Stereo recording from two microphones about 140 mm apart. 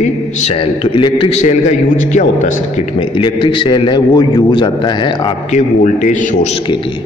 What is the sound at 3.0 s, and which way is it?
A man's voice, 35° left (ahead or behind).